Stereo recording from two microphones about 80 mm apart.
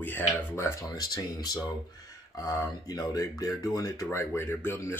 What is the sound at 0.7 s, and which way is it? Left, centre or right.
Speech, left.